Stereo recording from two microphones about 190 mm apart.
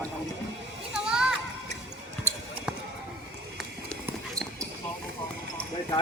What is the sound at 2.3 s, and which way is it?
Basketball bounce, 10° right (ahead or behind).